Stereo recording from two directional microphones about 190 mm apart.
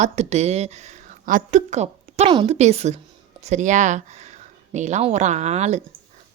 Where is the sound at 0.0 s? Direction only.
35° right (ahead or behind).